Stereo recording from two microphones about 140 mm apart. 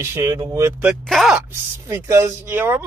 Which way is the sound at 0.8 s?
Centre (ahead or behind).